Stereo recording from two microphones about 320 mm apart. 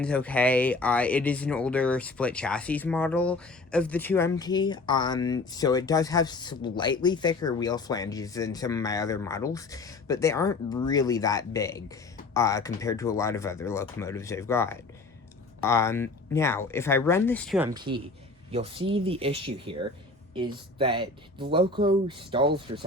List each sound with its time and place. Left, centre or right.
0.0 s speech: centre